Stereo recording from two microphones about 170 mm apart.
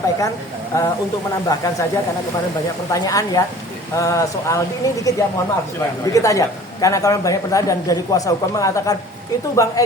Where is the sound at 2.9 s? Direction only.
20° left (ahead or behind).